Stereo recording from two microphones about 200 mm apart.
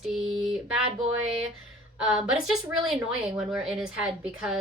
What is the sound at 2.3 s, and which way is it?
Speech, centre (ahead or behind).